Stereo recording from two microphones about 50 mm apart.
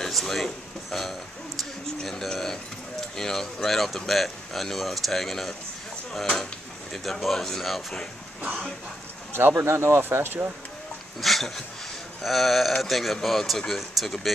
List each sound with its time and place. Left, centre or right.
0.0 s a sound: centre
0.9 s speech: centre
1.6 s a sound: centre
3.2 s speech: centre
9.6 s speech: right
11.1 s speech: centre